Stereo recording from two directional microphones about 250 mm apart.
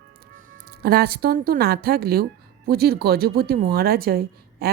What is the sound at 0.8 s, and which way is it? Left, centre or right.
Speech, right.